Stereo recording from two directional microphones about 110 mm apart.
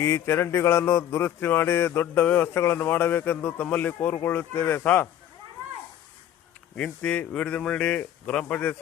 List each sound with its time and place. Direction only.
0.0 s a sound: 25° left (ahead or behind)
4.0 s speech: 20° left (ahead or behind)
6.7 s speech: 10° left (ahead or behind)